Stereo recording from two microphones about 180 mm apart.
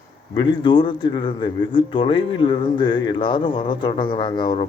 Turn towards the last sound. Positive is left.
turn(degrees=25)  # may be behind; listen again after turning